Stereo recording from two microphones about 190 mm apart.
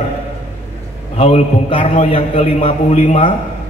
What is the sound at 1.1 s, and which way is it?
A man's voice, 35° left (ahead or behind).